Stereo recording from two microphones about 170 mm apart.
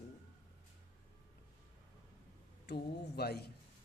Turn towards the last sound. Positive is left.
turn(degrees=70)  # may be behind; listen again after turning